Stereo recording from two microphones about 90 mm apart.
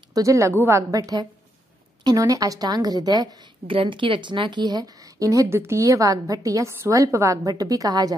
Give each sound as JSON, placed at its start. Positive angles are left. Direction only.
{"t": 0.1, "sound": "a woman's voice", "side_deg": -35}
{"t": 0.9, "sound": "a woman's voice", "side_deg": -45}
{"t": 3.6, "sound": "a woman's voice", "side_deg": -70}